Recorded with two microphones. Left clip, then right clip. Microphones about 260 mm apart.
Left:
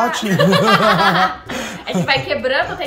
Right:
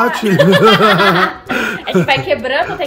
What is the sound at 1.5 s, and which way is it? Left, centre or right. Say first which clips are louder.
Speech: right 8 dB; centre.